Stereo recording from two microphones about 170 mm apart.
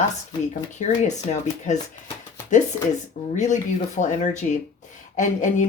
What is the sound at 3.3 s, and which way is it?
Speech, 45° left (ahead or behind).